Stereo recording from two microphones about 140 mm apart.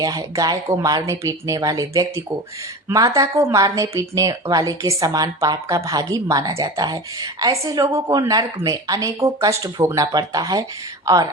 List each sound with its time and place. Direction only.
0.0 s speech: 25° right (ahead or behind)